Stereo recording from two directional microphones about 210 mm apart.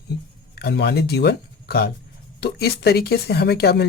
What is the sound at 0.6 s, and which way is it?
Speech, 50° left (ahead or behind).